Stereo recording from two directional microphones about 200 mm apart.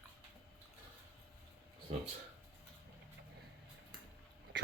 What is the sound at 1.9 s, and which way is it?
Speech, 30° right (ahead or behind).